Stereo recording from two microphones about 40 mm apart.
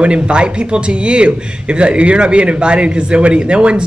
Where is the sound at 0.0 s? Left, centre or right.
Right.